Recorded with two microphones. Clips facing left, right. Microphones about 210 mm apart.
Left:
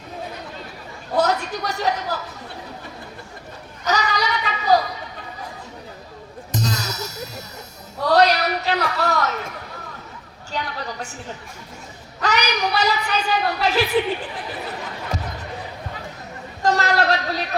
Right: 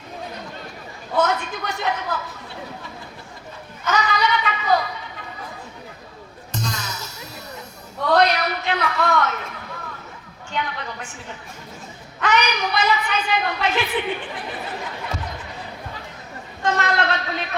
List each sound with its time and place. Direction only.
1.1 s a sound: 40° left (ahead or behind)
3.8 s a sound: 40° left (ahead or behind)
6.6 s music: 40° left (ahead or behind)
8.0 s a man's voice: 40° left (ahead or behind)
10.5 s a woman's voice: 35° left (ahead or behind)
12.2 s a woman's voice: 40° left (ahead or behind)
16.6 s a woman's voice: 40° left (ahead or behind)